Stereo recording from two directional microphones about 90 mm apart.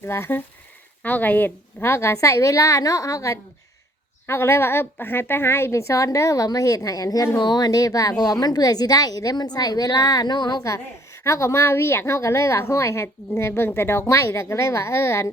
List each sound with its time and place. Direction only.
0.0 s a woman's voice: 25° left (ahead or behind); by 10.6 s 50° left (ahead or behind)
11.2 s a woman's voice: 30° left (ahead or behind)